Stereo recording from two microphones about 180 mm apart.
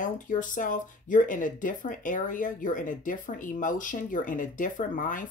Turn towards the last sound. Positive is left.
turn(degrees=45)  # may be behind; listen again after turning